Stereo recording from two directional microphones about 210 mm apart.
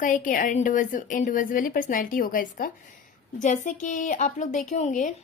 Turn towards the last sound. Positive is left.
turn(degrees=35)  # may be behind; listen again after turning